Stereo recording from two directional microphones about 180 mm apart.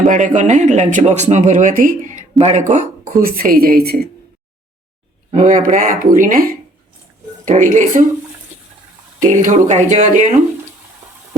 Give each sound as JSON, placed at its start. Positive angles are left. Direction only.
{"t": 0.1, "sound": "speech", "side_deg": -45}
{"t": 5.3, "sound": "speech", "side_deg": -45}
{"t": 9.2, "sound": "speech", "side_deg": -45}